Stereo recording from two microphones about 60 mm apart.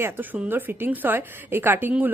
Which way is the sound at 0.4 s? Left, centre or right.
Right.